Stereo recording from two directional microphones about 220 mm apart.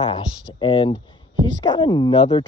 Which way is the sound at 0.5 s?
25° left (ahead or behind).